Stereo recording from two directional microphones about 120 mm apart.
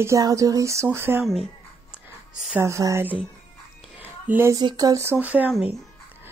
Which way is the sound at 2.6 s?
25° right (ahead or behind).